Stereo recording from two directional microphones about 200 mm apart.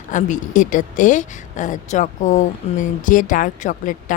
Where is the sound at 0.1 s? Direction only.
40° left (ahead or behind).